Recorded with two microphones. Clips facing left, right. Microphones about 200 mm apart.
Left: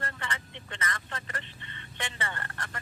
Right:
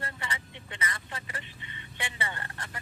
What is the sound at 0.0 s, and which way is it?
Vehicle, 10° right (ahead or behind).